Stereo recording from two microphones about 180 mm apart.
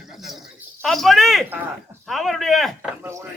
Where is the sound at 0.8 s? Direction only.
Centre (ahead or behind).